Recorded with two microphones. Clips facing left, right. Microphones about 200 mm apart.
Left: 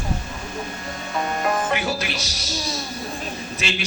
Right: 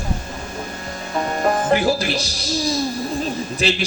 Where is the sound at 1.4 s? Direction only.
35° right (ahead or behind).